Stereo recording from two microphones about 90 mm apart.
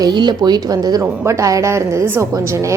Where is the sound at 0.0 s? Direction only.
55° right (ahead or behind).